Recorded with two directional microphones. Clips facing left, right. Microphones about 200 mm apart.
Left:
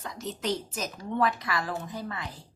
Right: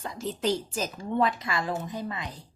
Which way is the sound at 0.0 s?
30° right (ahead or behind).